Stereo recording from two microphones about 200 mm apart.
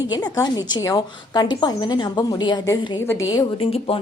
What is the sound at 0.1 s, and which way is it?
A woman's voice, 20° left (ahead or behind).